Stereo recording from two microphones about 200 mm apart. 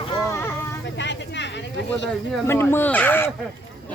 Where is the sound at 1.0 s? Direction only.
65° left (ahead or behind).